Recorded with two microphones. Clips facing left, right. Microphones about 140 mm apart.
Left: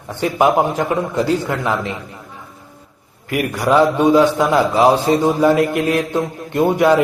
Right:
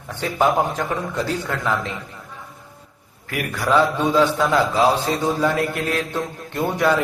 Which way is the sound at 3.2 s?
15° left (ahead or behind).